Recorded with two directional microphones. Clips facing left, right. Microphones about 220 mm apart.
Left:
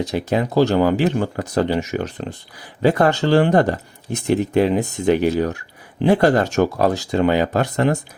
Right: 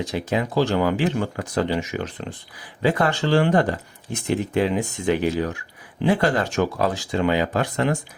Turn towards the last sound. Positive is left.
turn(degrees=40)  # may be behind; listen again after turning